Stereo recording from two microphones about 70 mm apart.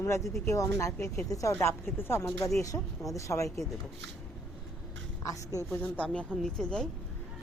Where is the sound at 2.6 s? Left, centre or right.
Left.